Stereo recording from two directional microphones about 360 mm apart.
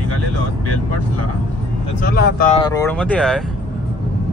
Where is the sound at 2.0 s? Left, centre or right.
Left.